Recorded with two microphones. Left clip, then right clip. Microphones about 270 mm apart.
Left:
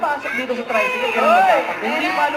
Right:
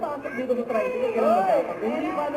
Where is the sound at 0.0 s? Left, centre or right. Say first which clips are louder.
Left 8 dB; centre.